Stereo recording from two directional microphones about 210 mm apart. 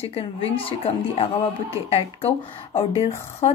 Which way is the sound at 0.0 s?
25° left (ahead or behind).